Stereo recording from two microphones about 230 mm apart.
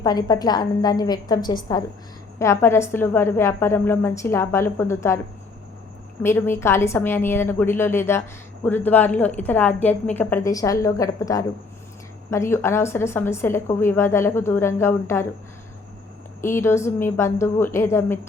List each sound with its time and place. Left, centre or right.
0.0 s a woman's voice: centre
6.2 s a woman's voice: centre
16.4 s a woman's voice: centre